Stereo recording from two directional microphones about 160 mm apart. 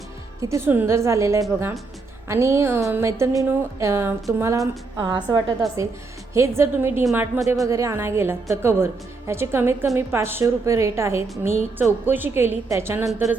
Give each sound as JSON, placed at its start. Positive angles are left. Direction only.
{"t": 0.4, "sound": "a woman's voice", "side_deg": -15}